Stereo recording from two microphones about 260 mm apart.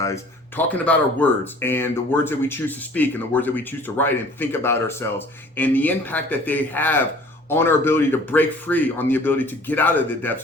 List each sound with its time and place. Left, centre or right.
0.0 s speech: centre